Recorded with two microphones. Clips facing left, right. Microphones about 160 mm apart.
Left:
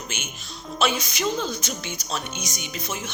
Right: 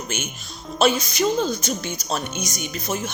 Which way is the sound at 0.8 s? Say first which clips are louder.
Right 5 dB; 35° right (ahead or behind).